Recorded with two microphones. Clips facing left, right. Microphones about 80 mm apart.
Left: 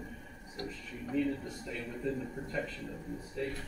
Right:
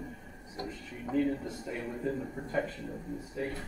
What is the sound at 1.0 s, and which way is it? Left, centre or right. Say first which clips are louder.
Speech: right 3 dB; right.